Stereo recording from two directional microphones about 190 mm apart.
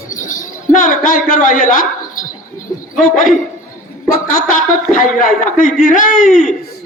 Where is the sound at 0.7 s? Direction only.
45° left (ahead or behind).